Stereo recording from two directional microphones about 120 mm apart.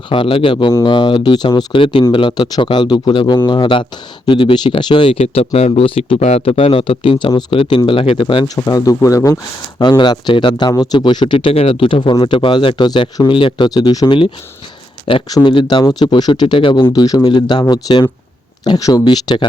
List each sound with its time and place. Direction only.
0.1 s speech: 45° left (ahead or behind)
8.5 s speech: 30° left (ahead or behind)
10.0 s speech: 40° left (ahead or behind)
11.3 s speech: 55° left (ahead or behind); by 14.2 s 35° left (ahead or behind)
15.3 s speech: 40° left (ahead or behind)